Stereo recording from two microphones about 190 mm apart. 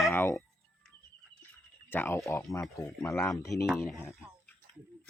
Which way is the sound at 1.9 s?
10° left (ahead or behind).